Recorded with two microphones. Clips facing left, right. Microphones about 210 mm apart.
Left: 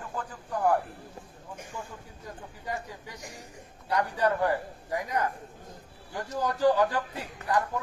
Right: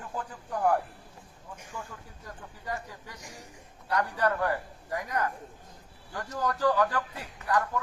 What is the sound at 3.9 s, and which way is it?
A man's voice, 20° left (ahead or behind).